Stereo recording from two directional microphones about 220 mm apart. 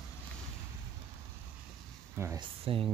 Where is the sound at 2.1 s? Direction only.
10° right (ahead or behind).